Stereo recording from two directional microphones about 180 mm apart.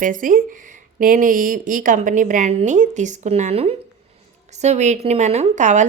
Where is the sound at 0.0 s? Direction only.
50° right (ahead or behind).